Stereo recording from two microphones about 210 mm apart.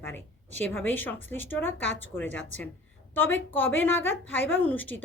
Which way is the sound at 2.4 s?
65° left (ahead or behind).